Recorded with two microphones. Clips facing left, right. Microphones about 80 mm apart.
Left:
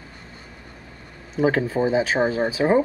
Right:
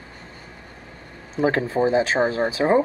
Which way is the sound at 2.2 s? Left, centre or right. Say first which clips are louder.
Even; right.